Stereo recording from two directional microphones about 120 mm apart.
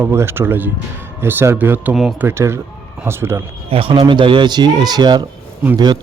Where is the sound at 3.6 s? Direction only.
50° right (ahead or behind).